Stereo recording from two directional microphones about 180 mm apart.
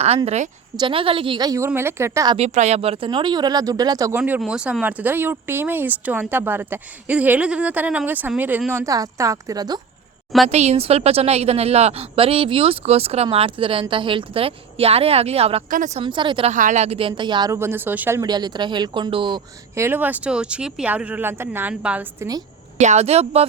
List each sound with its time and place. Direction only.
0.3 s a woman's voice: 40° right (ahead or behind)
0.8 s speech: 30° right (ahead or behind)
2.3 s speech: 35° right (ahead or behind); by 4.2 s 20° right (ahead or behind)
4.2 s speech: 5° right (ahead or behind); by 9.8 s 20° right (ahead or behind)
10.5 s a woman's voice: 35° right (ahead or behind)
16.0 s speech: 25° right (ahead or behind)
16.5 s speech: 45° right (ahead or behind); by 18.2 s 10° right (ahead or behind)
18.2 s speech: 25° right (ahead or behind)
19.7 s speech: 15° right (ahead or behind)
22.8 s a woman's voice: 40° right (ahead or behind)